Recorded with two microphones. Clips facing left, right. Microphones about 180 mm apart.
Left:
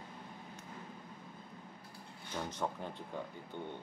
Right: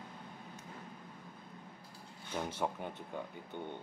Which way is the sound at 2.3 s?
10° right (ahead or behind).